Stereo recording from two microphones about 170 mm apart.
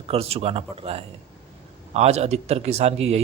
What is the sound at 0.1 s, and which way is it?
A man's voice, 35° right (ahead or behind).